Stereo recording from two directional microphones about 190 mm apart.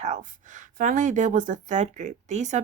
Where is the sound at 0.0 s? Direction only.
40° right (ahead or behind).